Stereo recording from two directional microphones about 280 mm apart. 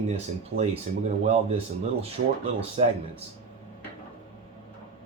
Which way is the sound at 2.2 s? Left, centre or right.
Right.